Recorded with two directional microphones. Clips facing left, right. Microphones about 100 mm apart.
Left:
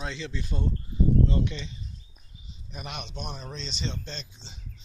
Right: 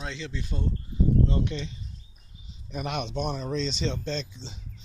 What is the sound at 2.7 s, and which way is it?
Speech, 90° right.